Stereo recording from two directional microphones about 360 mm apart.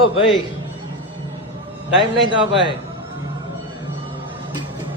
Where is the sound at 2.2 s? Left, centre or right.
Centre.